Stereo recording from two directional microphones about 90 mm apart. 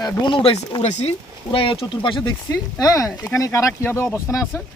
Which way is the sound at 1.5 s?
90° left.